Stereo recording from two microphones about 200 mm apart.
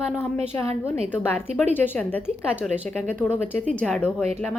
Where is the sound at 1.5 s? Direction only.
30° right (ahead or behind).